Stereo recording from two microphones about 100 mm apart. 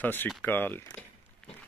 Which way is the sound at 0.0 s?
20° left (ahead or behind).